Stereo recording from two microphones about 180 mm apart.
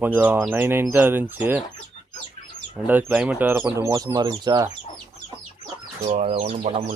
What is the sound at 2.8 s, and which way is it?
Speech, 10° right (ahead or behind).